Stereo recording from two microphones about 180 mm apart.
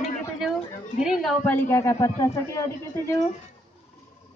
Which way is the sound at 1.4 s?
10° left (ahead or behind).